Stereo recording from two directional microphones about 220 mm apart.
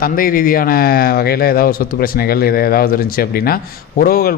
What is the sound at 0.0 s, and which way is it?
Speech, 40° left (ahead or behind).